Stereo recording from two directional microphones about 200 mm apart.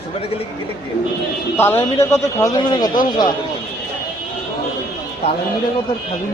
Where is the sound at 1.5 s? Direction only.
10° left (ahead or behind).